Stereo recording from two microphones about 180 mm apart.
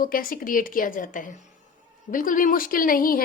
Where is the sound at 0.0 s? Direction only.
50° left (ahead or behind).